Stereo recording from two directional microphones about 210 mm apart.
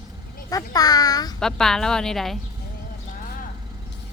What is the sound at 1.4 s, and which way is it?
A woman's voice, centre (ahead or behind).